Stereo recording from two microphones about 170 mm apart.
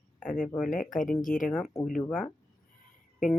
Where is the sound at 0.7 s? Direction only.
50° left (ahead or behind).